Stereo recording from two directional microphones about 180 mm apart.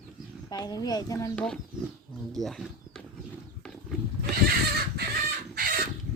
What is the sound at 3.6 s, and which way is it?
Wild animals, 5° left (ahead or behind).